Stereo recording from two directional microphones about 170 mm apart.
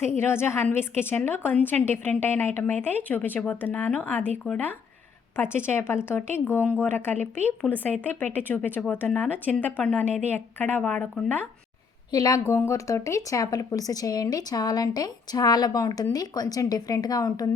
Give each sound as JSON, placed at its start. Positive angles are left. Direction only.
{"t": 0.2, "sound": "speech", "side_deg": 15}
{"t": 7.6, "sound": "speech", "side_deg": -10}
{"t": 8.0, "sound": "speech", "side_deg": 10}
{"t": 12.1, "sound": "a woman's voice", "side_deg": 20}